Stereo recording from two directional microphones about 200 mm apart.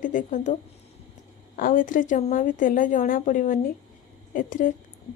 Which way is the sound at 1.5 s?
45° left (ahead or behind).